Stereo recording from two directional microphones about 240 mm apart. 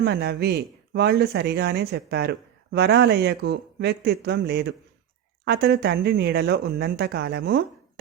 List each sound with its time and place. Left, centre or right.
0.0 s speech: right